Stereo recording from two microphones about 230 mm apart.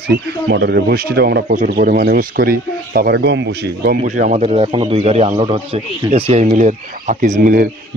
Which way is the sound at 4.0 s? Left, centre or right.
Right.